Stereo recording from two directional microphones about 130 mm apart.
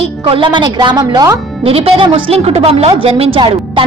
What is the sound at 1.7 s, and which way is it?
A woman's voice, 45° right (ahead or behind).